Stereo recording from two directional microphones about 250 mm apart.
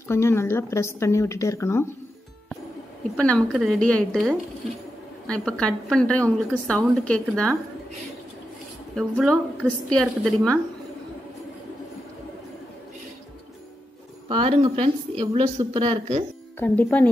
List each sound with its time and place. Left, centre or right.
0.1 s speech: centre
3.2 s a woman's voice: centre
8.9 s a woman's voice: centre
14.3 s speech: right
16.5 s speech: centre